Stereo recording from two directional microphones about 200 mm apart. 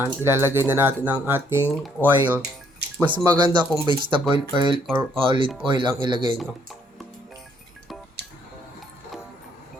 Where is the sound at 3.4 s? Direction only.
25° right (ahead or behind).